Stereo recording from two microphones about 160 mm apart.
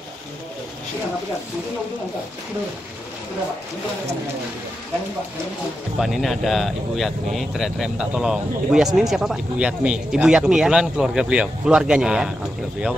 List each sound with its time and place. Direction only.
5.9 s speech: centre (ahead or behind)